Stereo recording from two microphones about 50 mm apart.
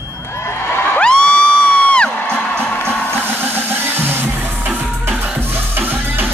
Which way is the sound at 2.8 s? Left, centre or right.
Right.